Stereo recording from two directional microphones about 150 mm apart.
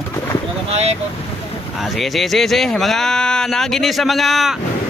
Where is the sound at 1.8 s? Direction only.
Centre (ahead or behind).